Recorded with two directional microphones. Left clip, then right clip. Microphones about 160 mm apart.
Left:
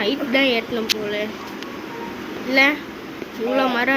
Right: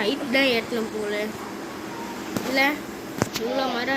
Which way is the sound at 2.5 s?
10° left (ahead or behind).